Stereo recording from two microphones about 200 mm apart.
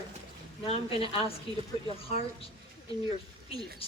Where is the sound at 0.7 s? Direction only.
25° left (ahead or behind).